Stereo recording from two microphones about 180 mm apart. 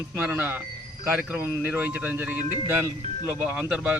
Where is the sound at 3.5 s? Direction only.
5° right (ahead or behind).